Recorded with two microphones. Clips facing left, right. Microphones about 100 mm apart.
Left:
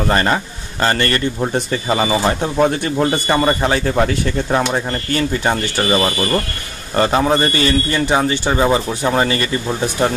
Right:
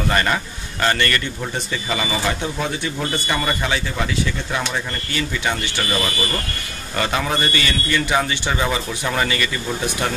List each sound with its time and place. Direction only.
0.1 s speech: 35° left (ahead or behind)
3.8 s speech: 50° left (ahead or behind); by 10.1 s 35° left (ahead or behind)